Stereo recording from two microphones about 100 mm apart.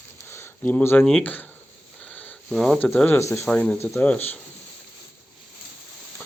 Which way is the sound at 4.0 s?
15° left (ahead or behind).